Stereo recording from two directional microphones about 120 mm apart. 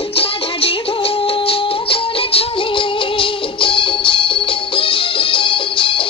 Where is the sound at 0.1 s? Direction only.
50° left (ahead or behind).